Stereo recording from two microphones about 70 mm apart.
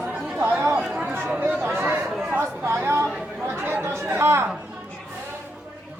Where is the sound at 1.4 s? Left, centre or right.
Centre.